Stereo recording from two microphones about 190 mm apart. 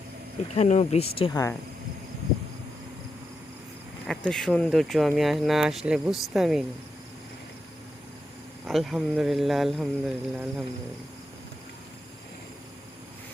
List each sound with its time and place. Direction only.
0.5 s speech: 35° left (ahead or behind)
1.3 s speech: 15° left (ahead or behind)
4.0 s speech: 5° left (ahead or behind)
8.6 s speech: centre (ahead or behind)